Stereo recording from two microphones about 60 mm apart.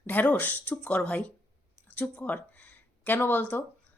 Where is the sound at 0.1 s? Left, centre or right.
Left.